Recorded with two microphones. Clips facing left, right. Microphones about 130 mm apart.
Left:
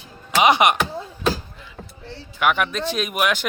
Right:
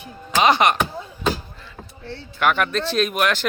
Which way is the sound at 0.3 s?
15° left (ahead or behind).